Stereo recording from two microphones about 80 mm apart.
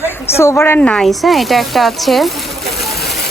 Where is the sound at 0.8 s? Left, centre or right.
Centre.